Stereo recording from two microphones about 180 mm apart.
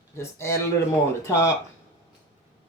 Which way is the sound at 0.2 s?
15° left (ahead or behind).